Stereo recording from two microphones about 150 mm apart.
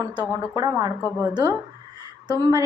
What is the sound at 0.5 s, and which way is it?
A woman's voice, 25° right (ahead or behind).